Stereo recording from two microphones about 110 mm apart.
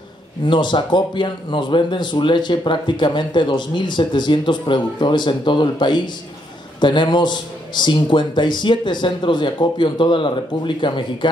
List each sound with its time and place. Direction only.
0.5 s speech: 45° left (ahead or behind)